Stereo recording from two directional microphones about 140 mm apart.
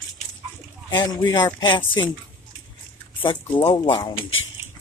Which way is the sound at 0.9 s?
30° left (ahead or behind).